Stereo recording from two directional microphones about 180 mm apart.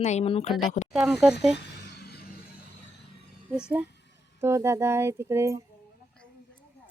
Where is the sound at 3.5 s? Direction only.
5° right (ahead or behind).